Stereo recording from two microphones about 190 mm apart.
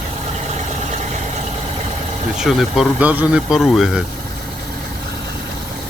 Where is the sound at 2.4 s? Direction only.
Centre (ahead or behind).